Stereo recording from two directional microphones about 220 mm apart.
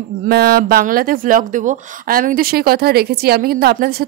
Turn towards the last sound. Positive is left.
turn(degrees=-45)  # may be behind; listen again after turning